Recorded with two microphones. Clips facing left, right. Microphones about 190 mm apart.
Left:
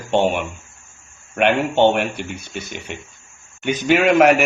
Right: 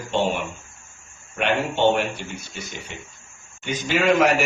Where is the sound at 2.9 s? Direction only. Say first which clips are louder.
Left 6 dB; 65° left (ahead or behind).